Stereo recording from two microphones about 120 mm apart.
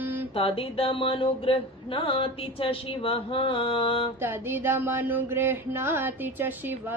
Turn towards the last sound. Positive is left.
turn(degrees=-15)  # may be behind; listen again after turning